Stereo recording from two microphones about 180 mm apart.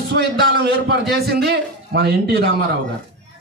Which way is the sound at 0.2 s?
70° right (ahead or behind).